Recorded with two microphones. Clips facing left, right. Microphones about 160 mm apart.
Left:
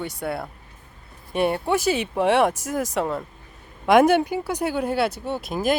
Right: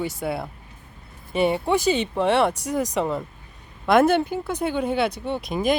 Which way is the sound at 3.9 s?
10° left (ahead or behind).